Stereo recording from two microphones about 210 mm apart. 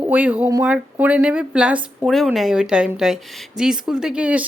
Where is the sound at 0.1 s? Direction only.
5° right (ahead or behind).